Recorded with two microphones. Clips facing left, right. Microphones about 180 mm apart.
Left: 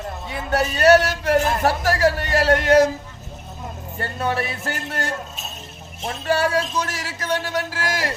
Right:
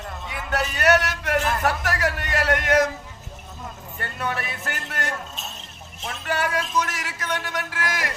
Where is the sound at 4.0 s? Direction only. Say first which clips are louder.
Left 5 dB; 30° left (ahead or behind).